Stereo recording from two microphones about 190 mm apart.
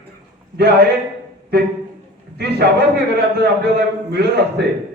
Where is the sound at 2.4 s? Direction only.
60° right (ahead or behind).